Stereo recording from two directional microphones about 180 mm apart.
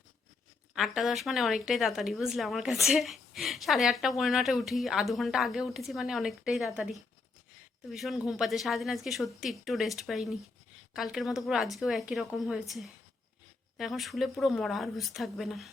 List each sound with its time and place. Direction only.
0.8 s speech: centre (ahead or behind)